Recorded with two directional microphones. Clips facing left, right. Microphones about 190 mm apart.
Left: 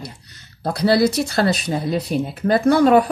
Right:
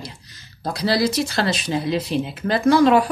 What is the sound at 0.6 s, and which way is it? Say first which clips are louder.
Speech: left 4 dB; 60° left (ahead or behind).